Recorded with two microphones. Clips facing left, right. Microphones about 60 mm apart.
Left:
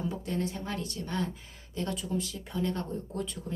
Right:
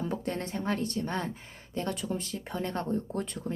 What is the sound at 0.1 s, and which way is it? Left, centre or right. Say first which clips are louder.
A woman's voice: even; right.